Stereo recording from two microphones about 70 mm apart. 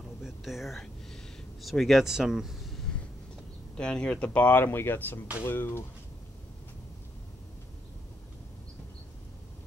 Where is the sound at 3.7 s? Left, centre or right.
Centre.